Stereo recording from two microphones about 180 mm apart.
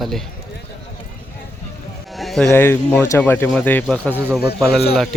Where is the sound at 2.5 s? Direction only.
10° left (ahead or behind).